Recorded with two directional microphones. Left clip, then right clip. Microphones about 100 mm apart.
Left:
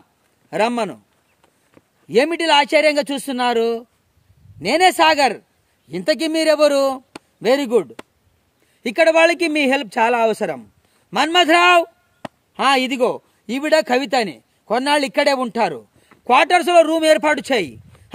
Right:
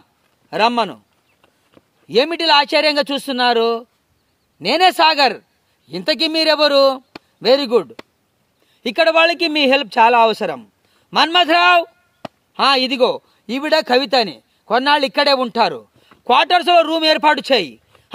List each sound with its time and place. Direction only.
0.5 s a man's voice: 25° left (ahead or behind)
2.0 s a man's voice: 30° left (ahead or behind)